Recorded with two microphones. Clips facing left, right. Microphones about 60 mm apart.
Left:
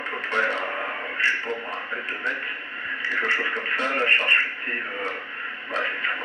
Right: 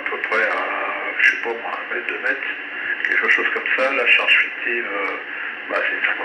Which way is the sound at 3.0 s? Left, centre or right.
Right.